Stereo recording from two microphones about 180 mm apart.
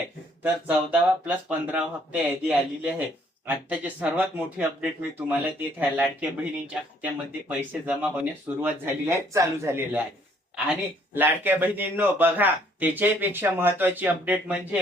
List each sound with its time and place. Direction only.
0.4 s speech: 10° right (ahead or behind)